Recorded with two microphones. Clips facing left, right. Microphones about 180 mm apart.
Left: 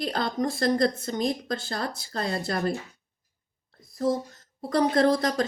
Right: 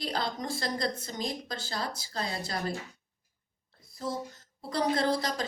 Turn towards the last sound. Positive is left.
turn(degrees=55)  # may be behind; listen again after turning